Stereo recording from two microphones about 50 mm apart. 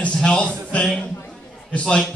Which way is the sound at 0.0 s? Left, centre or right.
Centre.